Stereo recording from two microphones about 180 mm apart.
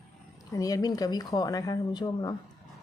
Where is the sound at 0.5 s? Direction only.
20° left (ahead or behind).